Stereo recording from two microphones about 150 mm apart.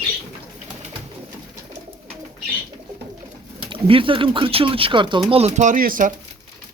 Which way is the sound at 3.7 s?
35° right (ahead or behind).